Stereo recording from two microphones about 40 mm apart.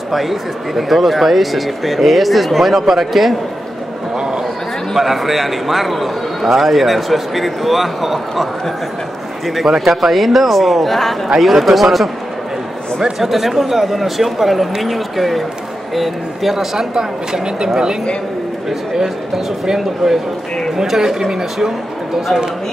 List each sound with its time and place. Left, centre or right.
0.1 s a man's voice: centre
4.9 s a man's voice: centre
9.6 s a man's voice: centre
13.2 s a man's voice: centre
16.7 s speech: centre